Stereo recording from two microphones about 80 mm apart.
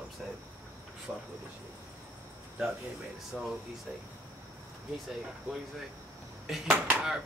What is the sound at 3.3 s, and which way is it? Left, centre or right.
Speech, centre.